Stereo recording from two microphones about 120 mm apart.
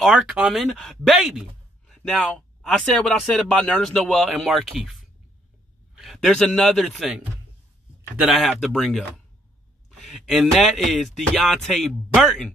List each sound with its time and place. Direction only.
0.0 s speech: 5° right (ahead or behind)
1.9 s a man's voice: 5° left (ahead or behind)
8.2 s speech: 5° right (ahead or behind)
9.9 s a sound: centre (ahead or behind)
10.5 s speech: centre (ahead or behind)